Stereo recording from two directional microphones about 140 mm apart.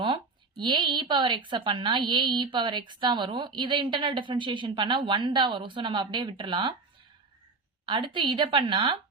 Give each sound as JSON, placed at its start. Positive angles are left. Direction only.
{"t": 0.6, "sound": "a woman's voice", "side_deg": -35}
{"t": 7.9, "sound": "a woman's voice", "side_deg": -35}